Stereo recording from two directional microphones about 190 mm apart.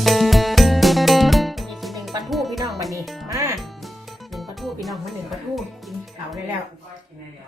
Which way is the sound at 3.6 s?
Centre (ahead or behind).